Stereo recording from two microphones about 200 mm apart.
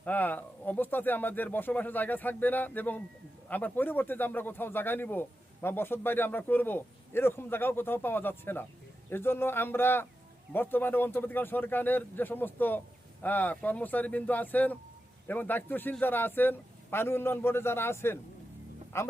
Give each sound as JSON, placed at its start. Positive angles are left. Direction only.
{"t": 0.0, "sound": "speech", "side_deg": 10}